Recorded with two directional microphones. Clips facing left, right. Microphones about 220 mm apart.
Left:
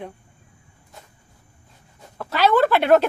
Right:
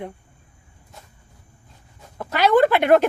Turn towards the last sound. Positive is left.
turn(degrees=-15)  # may be behind; listen again after turning